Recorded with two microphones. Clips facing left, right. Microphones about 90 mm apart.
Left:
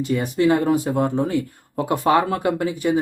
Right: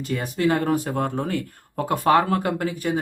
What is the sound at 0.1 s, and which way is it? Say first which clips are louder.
Speech: left 3 dB; 20° left (ahead or behind).